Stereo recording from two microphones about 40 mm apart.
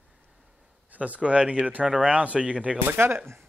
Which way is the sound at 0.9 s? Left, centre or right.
Right.